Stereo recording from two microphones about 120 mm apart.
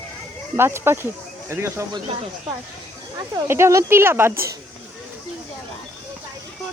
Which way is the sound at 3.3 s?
25° right (ahead or behind).